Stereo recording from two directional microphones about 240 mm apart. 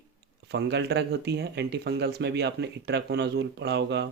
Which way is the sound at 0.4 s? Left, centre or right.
Right.